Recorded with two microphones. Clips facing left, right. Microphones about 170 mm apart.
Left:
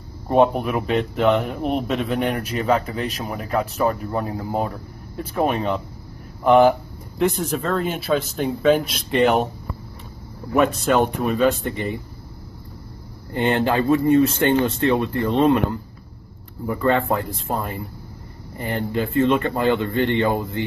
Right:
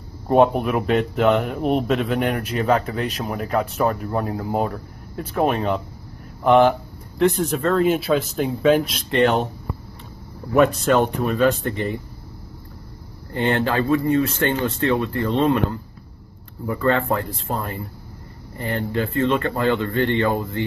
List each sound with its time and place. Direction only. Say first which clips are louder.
0.3 s speech: right 1 dB; centre (ahead or behind)
10.5 s speech: right 2 dB; centre (ahead or behind)
13.3 s speech: left 1 dB; 15° left (ahead or behind)